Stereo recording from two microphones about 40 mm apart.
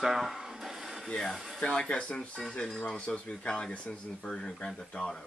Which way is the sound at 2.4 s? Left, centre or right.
Centre.